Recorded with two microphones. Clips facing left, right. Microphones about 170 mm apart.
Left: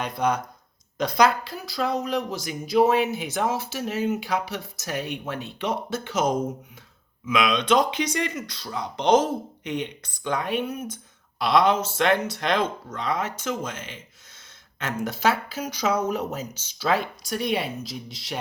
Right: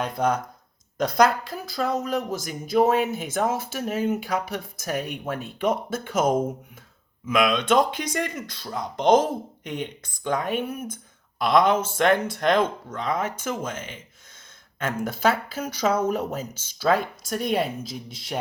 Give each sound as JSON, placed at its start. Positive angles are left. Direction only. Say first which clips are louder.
{"t": 0.2, "sound": "speech", "louder": "left 1 dB", "side_deg": -50}